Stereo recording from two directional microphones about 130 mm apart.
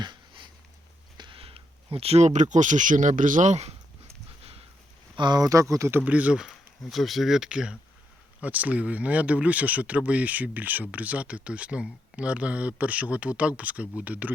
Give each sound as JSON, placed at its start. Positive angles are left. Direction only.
{"t": 0.0, "sound": "a sound", "side_deg": -35}
{"t": 1.1, "sound": "speech", "side_deg": -40}
{"t": 5.1, "sound": "speech", "side_deg": -35}
{"t": 6.1, "sound": "speech", "side_deg": -10}